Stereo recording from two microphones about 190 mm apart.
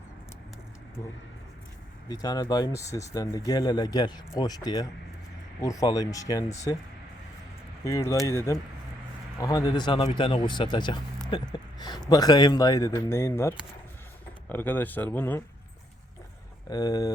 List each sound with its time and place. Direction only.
2.0 s a man's voice: 20° left (ahead or behind)
7.9 s a man's voice: 15° left (ahead or behind)
14.5 s speech: 10° left (ahead or behind)
16.6 s a man's voice: 20° left (ahead or behind)